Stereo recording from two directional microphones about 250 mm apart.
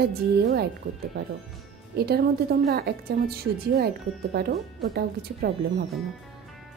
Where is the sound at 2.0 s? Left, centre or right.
Right.